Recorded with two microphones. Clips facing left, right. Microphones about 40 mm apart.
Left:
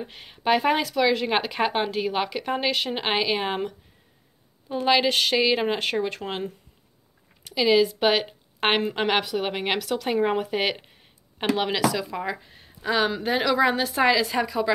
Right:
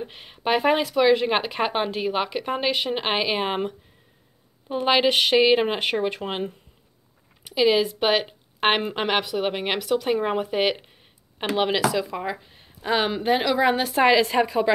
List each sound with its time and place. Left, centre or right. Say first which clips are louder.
0.1 s speech: left 1 dB; centre
7.4 s speech: even; centre
11.5 s speech: right 3 dB; centre
13.4 s speech: left 1 dB; centre
13.8 s a woman's voice: right 3 dB; right